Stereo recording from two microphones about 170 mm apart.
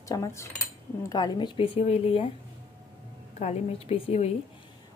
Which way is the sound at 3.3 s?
40° left (ahead or behind).